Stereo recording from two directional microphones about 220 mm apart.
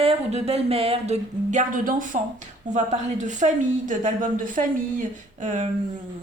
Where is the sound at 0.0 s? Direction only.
25° right (ahead or behind).